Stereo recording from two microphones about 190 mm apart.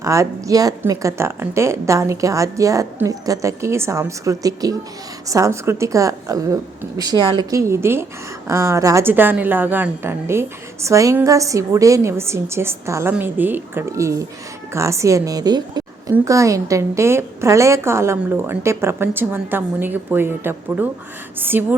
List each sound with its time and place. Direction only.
0.0 s a woman's voice: 15° right (ahead or behind)